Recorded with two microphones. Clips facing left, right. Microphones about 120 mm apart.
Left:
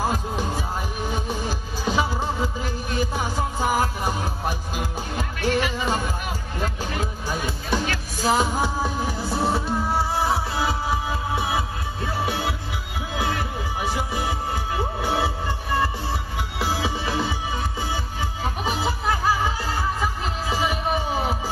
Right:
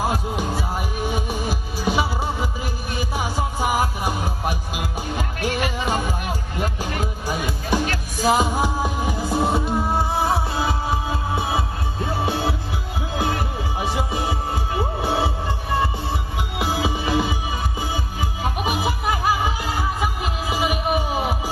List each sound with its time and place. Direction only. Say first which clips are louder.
0.0 s music: right 1 dB; 10° right (ahead or behind)
6.6 s music: right 1 dB; 10° right (ahead or behind)